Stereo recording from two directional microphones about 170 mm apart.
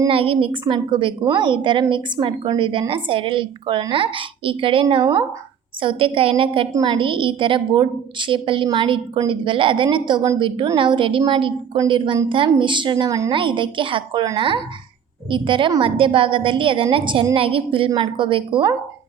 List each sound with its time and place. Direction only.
0.1 s a woman's voice: 30° right (ahead or behind)